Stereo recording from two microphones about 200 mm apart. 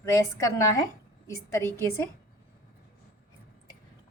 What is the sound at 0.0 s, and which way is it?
A woman's voice, 15° left (ahead or behind).